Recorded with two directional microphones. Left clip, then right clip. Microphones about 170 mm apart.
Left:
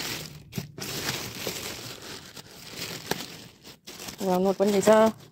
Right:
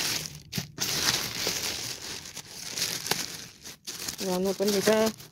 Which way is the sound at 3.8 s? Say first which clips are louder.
Right 4 dB; 5° right (ahead or behind).